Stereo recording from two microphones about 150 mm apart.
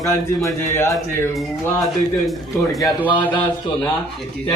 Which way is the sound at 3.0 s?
10° left (ahead or behind).